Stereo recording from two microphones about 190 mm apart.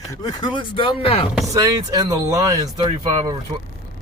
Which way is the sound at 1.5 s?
20° right (ahead or behind).